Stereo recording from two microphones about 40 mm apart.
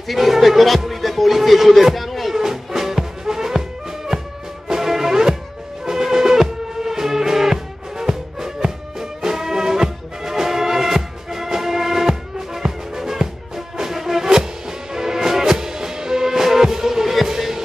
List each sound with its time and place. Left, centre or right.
0.1 s music: centre
4.6 s music: centre